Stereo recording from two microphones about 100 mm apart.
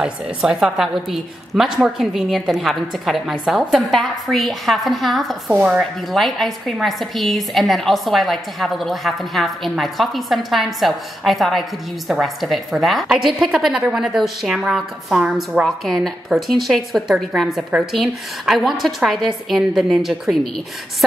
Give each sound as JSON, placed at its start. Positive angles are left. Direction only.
{"t": 0.0, "sound": "a woman's voice", "side_deg": -5}
{"t": 5.5, "sound": "speech", "side_deg": -15}
{"t": 5.8, "sound": "a woman's voice", "side_deg": 0}
{"t": 17.6, "sound": "a woman's voice", "side_deg": -10}